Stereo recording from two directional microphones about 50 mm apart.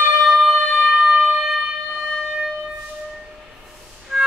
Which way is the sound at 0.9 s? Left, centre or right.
Centre.